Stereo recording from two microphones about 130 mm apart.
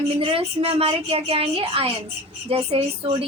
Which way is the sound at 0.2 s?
45° right (ahead or behind).